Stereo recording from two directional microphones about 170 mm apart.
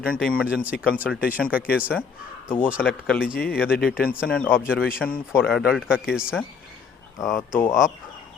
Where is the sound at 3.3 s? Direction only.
60° left (ahead or behind).